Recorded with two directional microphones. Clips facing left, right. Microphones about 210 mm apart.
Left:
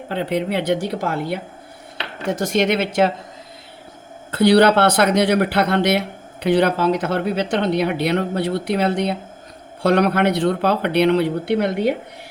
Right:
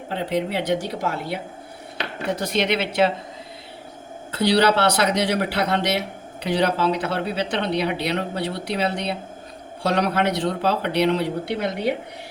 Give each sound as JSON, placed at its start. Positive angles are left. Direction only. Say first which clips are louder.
{"t": 0.1, "sound": "speech", "louder": "left 3 dB", "side_deg": 60}
{"t": 4.3, "sound": "speech", "louder": "left 5 dB", "side_deg": 55}